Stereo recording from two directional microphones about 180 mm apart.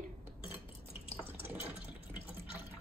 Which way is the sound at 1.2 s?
10° right (ahead or behind).